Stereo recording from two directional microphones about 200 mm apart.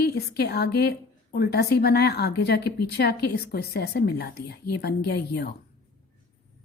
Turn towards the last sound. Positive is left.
turn(degrees=55)  # may be behind; listen again after turning